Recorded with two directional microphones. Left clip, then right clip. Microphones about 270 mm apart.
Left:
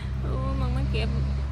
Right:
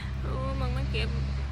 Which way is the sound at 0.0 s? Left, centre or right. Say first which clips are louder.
Left 1 dB; centre.